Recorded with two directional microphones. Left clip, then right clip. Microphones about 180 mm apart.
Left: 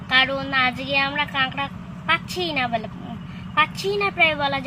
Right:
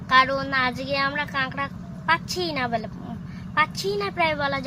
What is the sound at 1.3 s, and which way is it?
Speech, 15° right (ahead or behind).